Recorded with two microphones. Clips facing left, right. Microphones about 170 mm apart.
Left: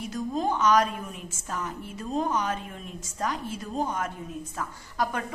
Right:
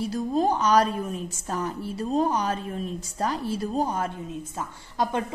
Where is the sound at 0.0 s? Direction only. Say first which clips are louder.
Right 5 dB; 35° right (ahead or behind).